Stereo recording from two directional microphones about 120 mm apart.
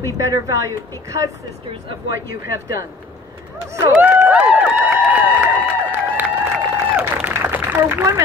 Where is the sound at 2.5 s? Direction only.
30° right (ahead or behind).